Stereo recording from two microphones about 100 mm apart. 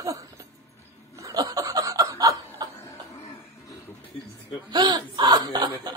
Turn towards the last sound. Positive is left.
turn(degrees=-45)  # may be behind; listen again after turning